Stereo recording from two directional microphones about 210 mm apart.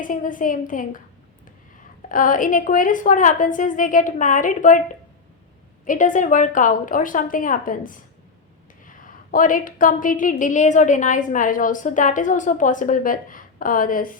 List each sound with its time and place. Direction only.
0.0 s a woman's voice: 40° left (ahead or behind)
2.0 s a woman's voice: 40° left (ahead or behind)
5.8 s a woman's voice: 40° left (ahead or behind)